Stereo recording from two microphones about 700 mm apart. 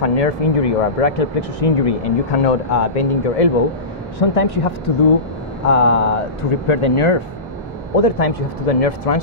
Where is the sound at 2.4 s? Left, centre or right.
Left.